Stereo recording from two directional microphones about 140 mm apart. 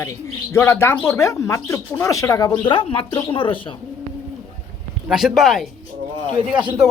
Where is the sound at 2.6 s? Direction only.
40° left (ahead or behind).